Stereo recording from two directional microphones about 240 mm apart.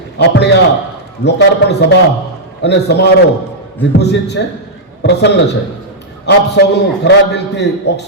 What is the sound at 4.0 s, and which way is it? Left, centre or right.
A man's voice, left.